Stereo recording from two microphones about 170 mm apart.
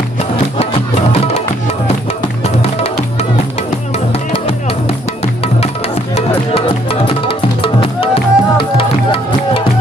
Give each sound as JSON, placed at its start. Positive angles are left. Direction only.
{"t": 0.6, "sound": "music", "side_deg": 40}
{"t": 2.4, "sound": "music", "side_deg": 40}
{"t": 6.1, "sound": "music", "side_deg": 35}